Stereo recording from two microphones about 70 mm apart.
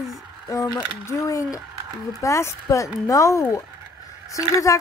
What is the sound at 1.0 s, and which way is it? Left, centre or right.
Speech, left.